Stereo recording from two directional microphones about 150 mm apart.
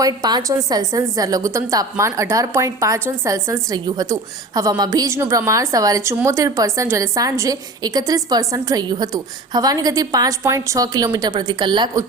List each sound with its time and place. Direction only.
0.0 s a woman's voice: 25° right (ahead or behind)